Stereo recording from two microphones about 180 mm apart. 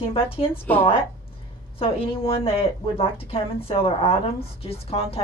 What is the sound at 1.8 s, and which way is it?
A woman's voice, 30° left (ahead or behind).